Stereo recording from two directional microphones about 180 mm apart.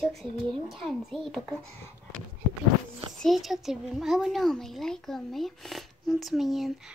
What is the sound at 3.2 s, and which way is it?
Speech, centre (ahead or behind).